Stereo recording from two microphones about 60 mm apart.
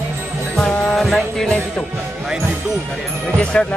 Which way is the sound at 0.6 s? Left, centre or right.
Centre.